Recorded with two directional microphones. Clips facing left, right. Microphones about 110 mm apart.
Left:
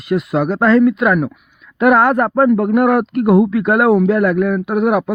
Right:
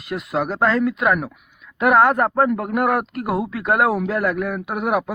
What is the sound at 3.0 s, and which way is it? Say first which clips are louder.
Speech: left 10 dB; 35° right (ahead or behind).